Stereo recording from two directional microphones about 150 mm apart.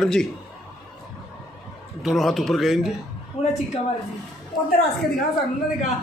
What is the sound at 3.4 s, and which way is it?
Speech, 45° left (ahead or behind).